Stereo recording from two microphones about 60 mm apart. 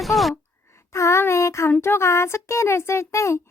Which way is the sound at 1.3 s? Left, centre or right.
Left.